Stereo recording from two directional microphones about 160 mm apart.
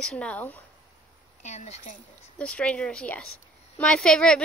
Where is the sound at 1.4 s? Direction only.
45° left (ahead or behind).